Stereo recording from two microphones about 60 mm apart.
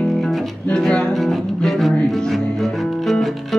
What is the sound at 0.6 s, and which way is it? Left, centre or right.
Speech, centre.